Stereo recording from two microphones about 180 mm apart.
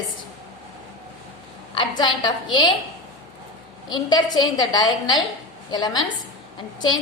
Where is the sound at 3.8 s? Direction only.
25° left (ahead or behind).